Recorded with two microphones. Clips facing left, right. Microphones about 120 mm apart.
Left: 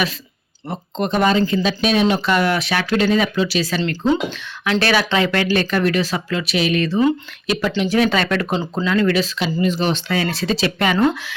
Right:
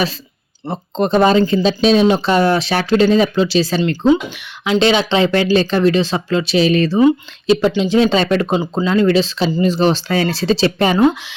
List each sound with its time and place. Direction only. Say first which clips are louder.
0.7 s speech: right 5 dB; 35° right (ahead or behind)
3.8 s speech: right 4 dB; 15° right (ahead or behind)
10.9 s speech: right 4 dB; 15° right (ahead or behind)